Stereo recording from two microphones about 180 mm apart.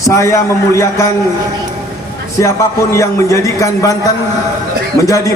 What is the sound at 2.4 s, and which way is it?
A man's voice, 15° left (ahead or behind).